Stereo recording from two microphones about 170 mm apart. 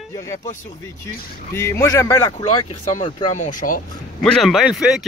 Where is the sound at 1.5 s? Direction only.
15° left (ahead or behind).